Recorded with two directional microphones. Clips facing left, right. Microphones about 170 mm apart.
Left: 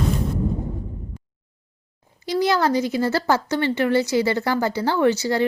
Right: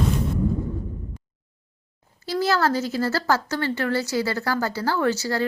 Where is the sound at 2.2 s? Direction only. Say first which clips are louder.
Left 2 dB; 15° left (ahead or behind).